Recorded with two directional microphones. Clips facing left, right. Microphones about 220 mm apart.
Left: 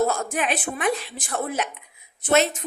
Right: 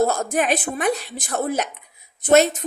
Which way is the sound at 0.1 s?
40° right (ahead or behind).